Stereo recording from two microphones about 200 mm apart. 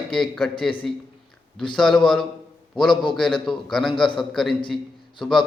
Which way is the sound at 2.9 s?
25° left (ahead or behind).